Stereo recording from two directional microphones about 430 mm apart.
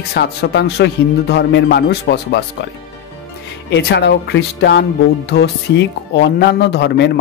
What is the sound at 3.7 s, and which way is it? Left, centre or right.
Speech, left.